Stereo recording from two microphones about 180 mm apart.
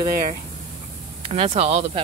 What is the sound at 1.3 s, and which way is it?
Speech, 35° right (ahead or behind).